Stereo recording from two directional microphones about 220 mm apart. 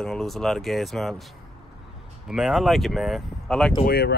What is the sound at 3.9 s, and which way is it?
Speech, 45° left (ahead or behind).